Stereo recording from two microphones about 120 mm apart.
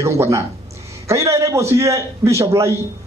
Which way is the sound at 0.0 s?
25° right (ahead or behind).